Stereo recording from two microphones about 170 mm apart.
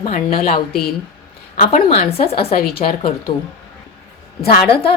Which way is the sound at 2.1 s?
35° left (ahead or behind).